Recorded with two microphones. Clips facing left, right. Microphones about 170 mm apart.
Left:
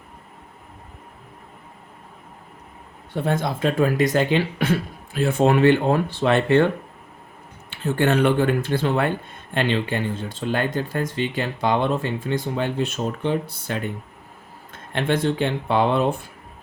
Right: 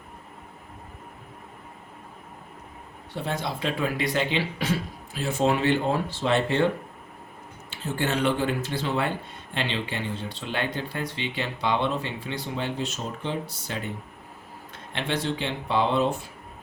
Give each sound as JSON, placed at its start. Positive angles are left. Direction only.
{"t": 3.2, "sound": "speech", "side_deg": 50}
{"t": 7.7, "sound": "speech", "side_deg": 60}